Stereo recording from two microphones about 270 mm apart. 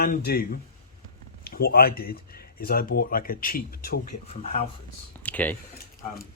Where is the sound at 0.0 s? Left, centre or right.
Left.